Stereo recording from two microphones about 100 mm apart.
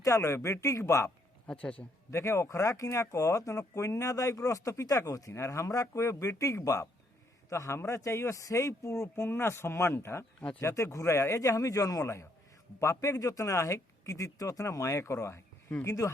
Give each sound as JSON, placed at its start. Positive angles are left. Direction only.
{"t": 0.0, "sound": "a man's voice", "side_deg": 30}